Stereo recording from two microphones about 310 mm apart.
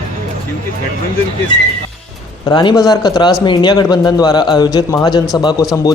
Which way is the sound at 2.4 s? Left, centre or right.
Centre.